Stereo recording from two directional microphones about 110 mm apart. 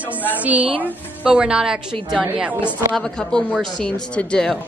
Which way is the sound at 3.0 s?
5° left (ahead or behind).